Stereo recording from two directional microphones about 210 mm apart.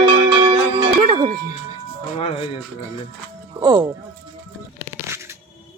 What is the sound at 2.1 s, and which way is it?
Music, 25° left (ahead or behind).